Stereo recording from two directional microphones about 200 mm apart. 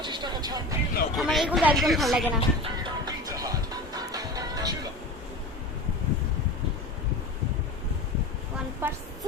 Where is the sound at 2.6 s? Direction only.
20° right (ahead or behind).